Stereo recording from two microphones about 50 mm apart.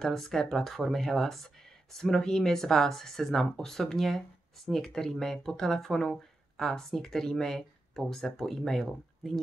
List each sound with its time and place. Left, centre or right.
0.0 s speech: centre